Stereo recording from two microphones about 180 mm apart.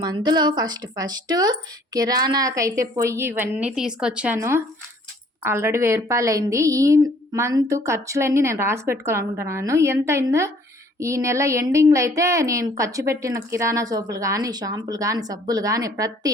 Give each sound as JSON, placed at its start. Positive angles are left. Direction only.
{"t": 0.0, "sound": "a woman's voice", "side_deg": -25}